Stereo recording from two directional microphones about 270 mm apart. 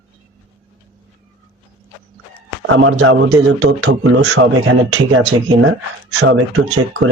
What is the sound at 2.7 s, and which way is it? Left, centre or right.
Speech, right.